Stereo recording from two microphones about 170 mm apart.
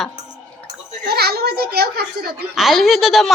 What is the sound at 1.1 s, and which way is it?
A child's voice, 65° right (ahead or behind).